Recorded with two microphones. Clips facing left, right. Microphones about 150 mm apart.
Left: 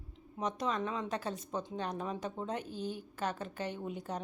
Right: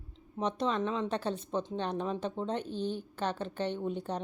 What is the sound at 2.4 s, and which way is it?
A woman's voice, 10° left (ahead or behind).